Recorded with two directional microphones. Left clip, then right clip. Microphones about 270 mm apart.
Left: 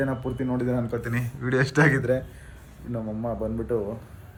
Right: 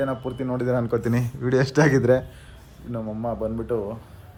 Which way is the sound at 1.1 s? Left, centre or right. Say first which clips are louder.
Right 4 dB; centre.